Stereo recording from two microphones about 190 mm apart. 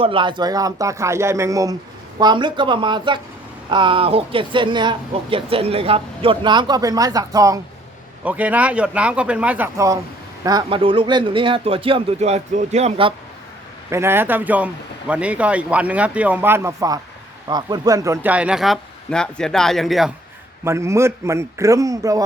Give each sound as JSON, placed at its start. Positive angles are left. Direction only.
{"t": 0.0, "sound": "speech", "side_deg": -25}
{"t": 8.2, "sound": "speech", "side_deg": -10}
{"t": 13.9, "sound": "speech", "side_deg": -10}
{"t": 20.7, "sound": "speech", "side_deg": -15}